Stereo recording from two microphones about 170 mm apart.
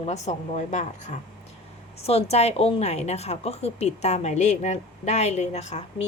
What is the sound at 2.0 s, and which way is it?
A woman's voice, 35° left (ahead or behind).